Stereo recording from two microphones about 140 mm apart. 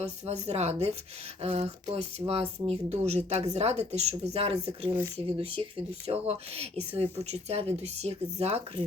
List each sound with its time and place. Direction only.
0.0 s speech: 50° right (ahead or behind)